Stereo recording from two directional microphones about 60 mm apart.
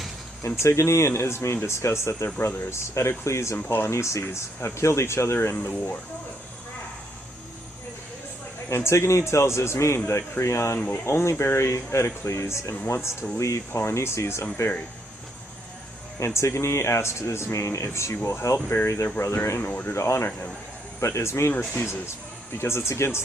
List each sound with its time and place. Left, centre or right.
0.6 s a man's voice: left
5.5 s speech: left
8.7 s a man's voice: left
10.8 s speech: left
11.0 s a man's voice: left
16.2 s a man's voice: left
18.5 s a man's voice: left
19.9 s a man's voice: left
22.5 s a man's voice: left